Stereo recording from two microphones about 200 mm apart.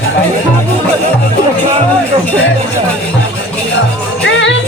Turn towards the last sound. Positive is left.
turn(degrees=70)  # may be behind; listen again after turning